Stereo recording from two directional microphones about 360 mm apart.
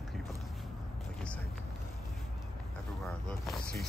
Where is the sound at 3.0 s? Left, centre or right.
Centre.